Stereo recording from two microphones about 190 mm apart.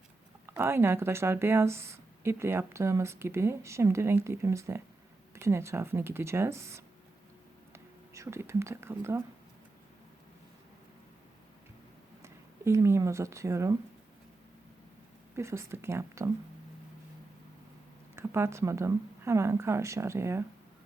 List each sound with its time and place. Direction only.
0.4 s speech: 10° right (ahead or behind)
7.7 s whispering: 15° right (ahead or behind)
12.2 s speech: 15° right (ahead or behind)
15.4 s speech: 15° right (ahead or behind)
18.2 s speech: 15° right (ahead or behind)